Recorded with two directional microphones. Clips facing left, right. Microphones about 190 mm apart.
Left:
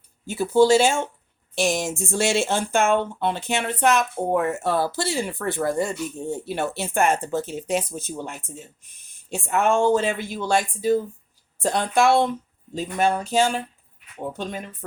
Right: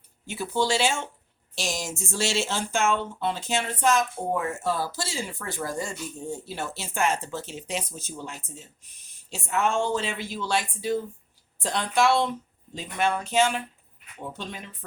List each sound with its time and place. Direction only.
0.3 s speech: 45° left (ahead or behind)
14.3 s speech: 45° left (ahead or behind)